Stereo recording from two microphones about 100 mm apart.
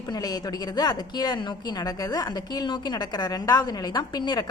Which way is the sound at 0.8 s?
45° left (ahead or behind).